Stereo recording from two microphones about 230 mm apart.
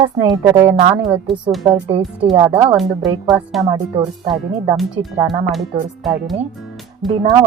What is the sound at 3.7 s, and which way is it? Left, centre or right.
Speech, centre.